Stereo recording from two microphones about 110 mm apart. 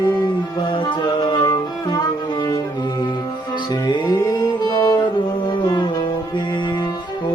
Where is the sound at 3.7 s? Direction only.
40° left (ahead or behind).